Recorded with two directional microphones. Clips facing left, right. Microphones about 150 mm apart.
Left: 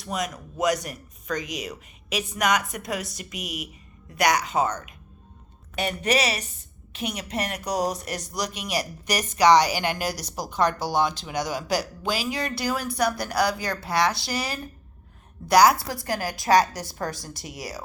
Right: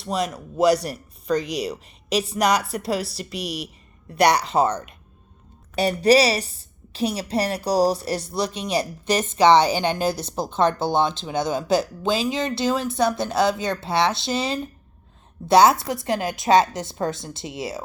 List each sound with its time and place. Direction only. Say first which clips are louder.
0.0 s a woman's voice: right 5 dB; 30° right (ahead or behind)